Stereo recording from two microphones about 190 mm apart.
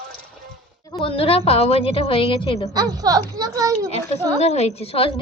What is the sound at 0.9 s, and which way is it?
A woman's voice, 30° left (ahead or behind).